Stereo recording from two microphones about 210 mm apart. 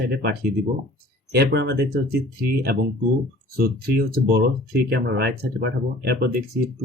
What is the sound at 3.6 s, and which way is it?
Speech, 45° right (ahead or behind).